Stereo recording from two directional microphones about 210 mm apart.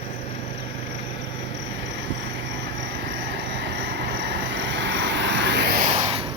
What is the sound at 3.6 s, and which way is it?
Vehicle, 55° right (ahead or behind).